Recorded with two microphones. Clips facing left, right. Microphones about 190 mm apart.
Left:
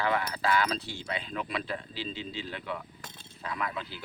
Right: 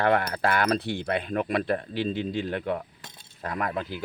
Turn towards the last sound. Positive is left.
turn(degrees=-50)  # may be behind; listen again after turning